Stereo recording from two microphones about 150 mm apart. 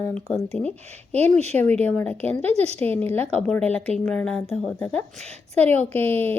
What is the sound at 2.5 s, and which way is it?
Speech, 45° right (ahead or behind).